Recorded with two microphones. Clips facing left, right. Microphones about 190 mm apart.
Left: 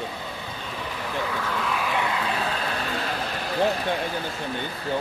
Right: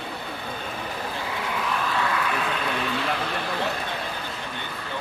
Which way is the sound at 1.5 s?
5° right (ahead or behind).